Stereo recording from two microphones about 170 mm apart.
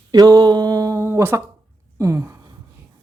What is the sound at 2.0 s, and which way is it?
Gasp, 15° right (ahead or behind).